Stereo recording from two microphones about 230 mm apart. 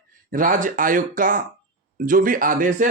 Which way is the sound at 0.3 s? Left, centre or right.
Right.